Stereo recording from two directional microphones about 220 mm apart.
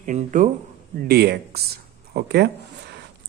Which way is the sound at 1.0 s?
45° right (ahead or behind).